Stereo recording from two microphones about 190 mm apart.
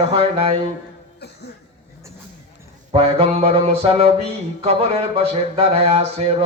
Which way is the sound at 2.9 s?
30° right (ahead or behind).